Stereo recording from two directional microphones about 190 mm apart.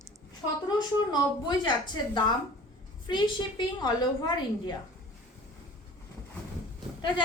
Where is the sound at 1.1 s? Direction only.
20° left (ahead or behind).